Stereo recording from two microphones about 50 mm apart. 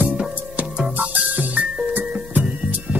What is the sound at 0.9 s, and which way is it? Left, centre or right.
Music, right.